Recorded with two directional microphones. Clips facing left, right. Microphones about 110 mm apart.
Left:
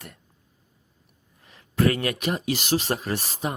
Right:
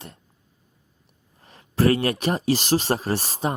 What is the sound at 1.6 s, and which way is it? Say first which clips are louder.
Speech: right 3 dB; 35° right (ahead or behind).